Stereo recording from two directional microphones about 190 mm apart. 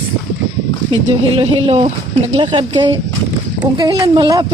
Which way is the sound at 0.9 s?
30° right (ahead or behind).